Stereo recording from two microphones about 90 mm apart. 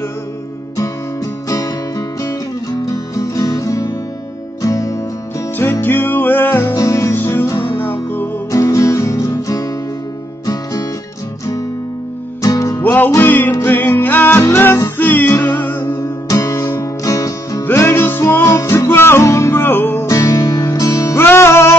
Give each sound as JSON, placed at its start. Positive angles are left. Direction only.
{"t": 1.5, "sound": "music", "side_deg": 40}
{"t": 5.6, "sound": "music", "side_deg": 25}
{"t": 6.7, "sound": "music", "side_deg": 35}
{"t": 7.2, "sound": "music", "side_deg": 20}
{"t": 8.5, "sound": "music", "side_deg": 40}
{"t": 12.4, "sound": "music", "side_deg": 40}
{"t": 12.8, "sound": "music", "side_deg": 20}
{"t": 16.0, "sound": "music", "side_deg": 35}
{"t": 17.0, "sound": "music", "side_deg": 40}
{"t": 17.6, "sound": "music", "side_deg": 25}
{"t": 20.1, "sound": "music", "side_deg": 40}